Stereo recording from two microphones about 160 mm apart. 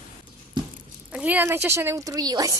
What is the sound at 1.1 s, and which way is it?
A woman's voice, 10° right (ahead or behind).